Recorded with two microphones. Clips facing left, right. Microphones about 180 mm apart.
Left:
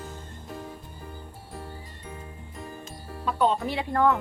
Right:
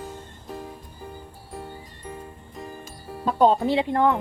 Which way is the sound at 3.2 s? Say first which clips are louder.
Right 6 dB; 40° right (ahead or behind).